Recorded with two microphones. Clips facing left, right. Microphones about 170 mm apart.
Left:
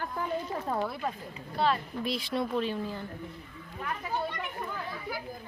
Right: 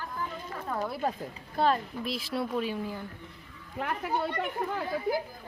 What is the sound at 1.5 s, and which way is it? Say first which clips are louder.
Speech: right 2 dB; 45° right (ahead or behind).